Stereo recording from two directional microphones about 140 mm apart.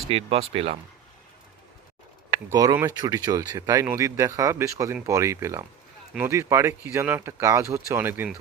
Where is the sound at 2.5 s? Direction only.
25° right (ahead or behind).